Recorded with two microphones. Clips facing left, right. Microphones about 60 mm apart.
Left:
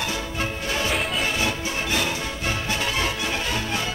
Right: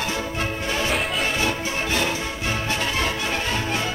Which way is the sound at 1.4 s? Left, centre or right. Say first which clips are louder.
Right 2 dB; right.